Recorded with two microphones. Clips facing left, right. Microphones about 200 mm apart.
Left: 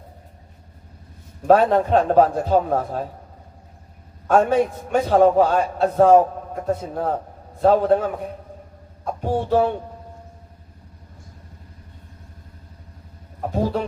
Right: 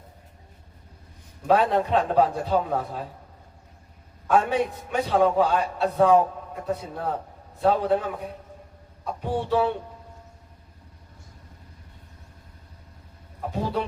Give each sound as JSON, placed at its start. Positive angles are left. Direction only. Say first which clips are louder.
{"t": 1.5, "sound": "a man's voice", "louder": "left 5 dB", "side_deg": 45}
{"t": 4.3, "sound": "a man's voice", "louder": "left 5 dB", "side_deg": 45}
{"t": 9.2, "sound": "a man's voice", "louder": "left 4 dB", "side_deg": 45}
{"t": 13.5, "sound": "speech", "louder": "left 5 dB", "side_deg": 45}